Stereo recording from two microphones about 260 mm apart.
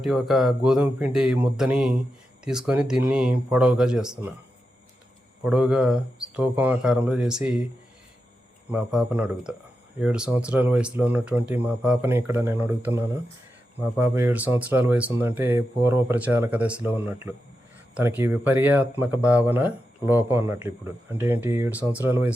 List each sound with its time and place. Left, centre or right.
0.0 s speech: centre
5.4 s speech: centre
8.7 s speech: centre